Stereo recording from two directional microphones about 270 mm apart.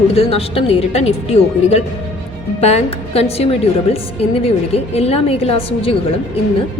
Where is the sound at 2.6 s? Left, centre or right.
Left.